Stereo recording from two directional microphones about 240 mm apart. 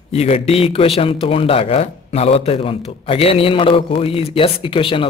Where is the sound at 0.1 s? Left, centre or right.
Left.